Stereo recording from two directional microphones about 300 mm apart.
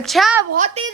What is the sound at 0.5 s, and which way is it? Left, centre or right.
Speech, right.